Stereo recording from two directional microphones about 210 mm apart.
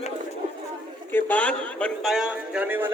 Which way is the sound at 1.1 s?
10° left (ahead or behind).